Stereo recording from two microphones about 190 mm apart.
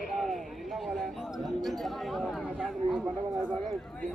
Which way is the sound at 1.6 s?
Centre (ahead or behind).